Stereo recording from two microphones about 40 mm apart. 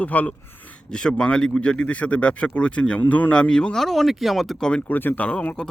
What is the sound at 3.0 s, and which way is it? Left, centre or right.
Speech, left.